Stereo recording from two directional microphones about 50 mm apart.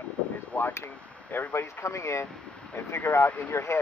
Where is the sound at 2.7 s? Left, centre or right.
Left.